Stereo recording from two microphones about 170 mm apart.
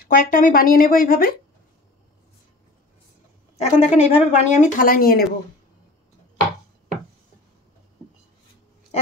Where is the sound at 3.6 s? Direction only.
40° left (ahead or behind); by 5.3 s 60° left (ahead or behind).